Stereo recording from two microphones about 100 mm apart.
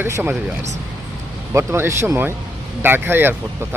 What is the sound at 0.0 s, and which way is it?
Speech, 20° right (ahead or behind).